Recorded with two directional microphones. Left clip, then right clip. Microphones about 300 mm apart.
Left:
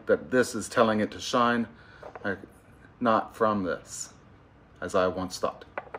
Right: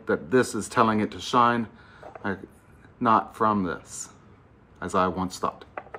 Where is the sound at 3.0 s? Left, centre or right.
Centre.